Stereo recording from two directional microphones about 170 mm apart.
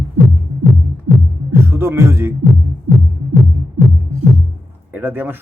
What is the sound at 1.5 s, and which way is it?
Speech, 15° right (ahead or behind).